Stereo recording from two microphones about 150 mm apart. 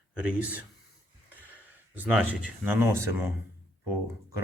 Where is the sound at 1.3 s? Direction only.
10° right (ahead or behind).